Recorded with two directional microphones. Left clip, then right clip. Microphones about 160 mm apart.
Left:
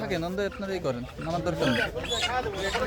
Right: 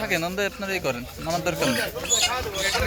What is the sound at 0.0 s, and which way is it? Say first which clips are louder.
Speech: right 5 dB; 15° right (ahead or behind).